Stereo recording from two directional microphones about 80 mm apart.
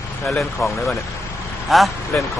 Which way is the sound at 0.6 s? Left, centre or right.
Left.